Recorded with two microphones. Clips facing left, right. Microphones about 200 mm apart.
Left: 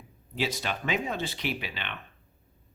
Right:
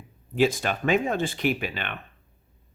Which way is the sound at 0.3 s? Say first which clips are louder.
Right 8 dB; 50° right (ahead or behind).